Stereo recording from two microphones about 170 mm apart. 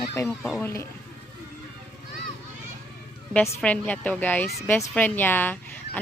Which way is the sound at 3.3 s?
5° left (ahead or behind).